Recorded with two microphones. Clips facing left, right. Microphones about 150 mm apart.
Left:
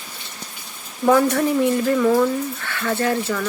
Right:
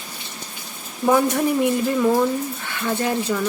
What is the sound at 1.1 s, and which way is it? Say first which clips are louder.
Speech: left 2 dB; 15° right (ahead or behind).